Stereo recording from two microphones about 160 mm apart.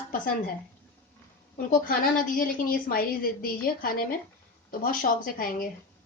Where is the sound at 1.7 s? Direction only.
65° left (ahead or behind).